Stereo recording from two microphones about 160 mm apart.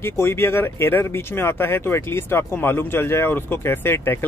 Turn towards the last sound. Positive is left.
turn(degrees=15)  # may be behind; listen again after turning